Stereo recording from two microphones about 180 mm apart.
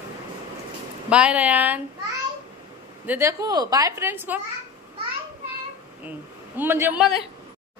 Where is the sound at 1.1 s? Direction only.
5° right (ahead or behind).